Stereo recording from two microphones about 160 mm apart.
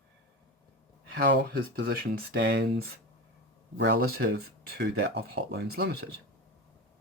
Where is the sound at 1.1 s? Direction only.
70° right (ahead or behind); by 2.8 s 90° right.